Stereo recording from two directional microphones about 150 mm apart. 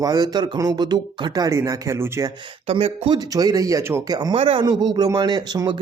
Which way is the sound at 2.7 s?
40° right (ahead or behind).